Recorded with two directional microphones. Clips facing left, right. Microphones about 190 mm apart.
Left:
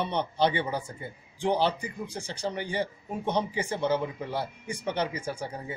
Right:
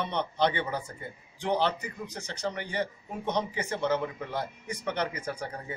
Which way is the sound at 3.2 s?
10° left (ahead or behind).